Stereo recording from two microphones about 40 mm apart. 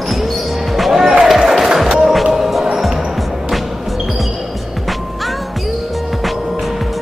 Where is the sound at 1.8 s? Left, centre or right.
Centre.